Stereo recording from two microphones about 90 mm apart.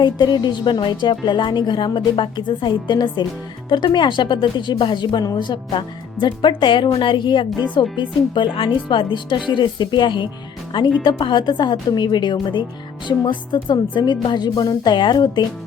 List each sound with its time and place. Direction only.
0.0 s a woman's voice: 55° left (ahead or behind)